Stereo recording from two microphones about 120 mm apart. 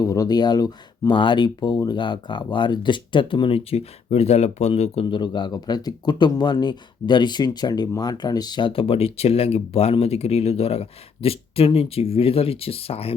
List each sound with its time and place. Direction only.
0.0 s speech: 30° left (ahead or behind); by 13.1 s 55° left (ahead or behind)